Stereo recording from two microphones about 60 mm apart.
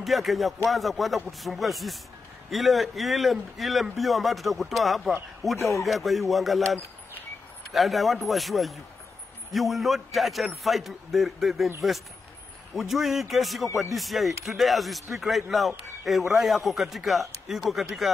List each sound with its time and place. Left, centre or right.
0.0 s speech: centre
5.6 s speech: left
5.9 s speech: centre
12.7 s speech: centre